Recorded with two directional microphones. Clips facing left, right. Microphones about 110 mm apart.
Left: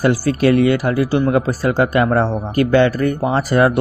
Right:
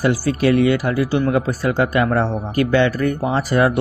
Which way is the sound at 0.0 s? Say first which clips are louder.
Left 2 dB; 50° left (ahead or behind).